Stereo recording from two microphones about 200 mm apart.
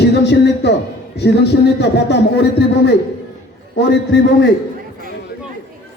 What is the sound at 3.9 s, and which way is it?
Speech, 60° left (ahead or behind).